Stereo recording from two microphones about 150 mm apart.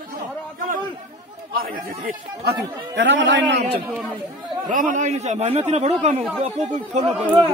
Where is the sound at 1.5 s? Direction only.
80° right.